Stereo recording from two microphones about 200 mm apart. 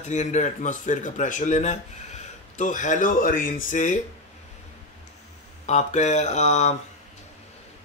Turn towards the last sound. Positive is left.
turn(degrees=35)  # may be behind; listen again after turning